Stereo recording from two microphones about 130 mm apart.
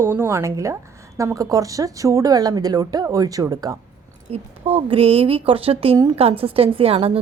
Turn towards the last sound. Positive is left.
turn(degrees=-45)  # may be behind; listen again after turning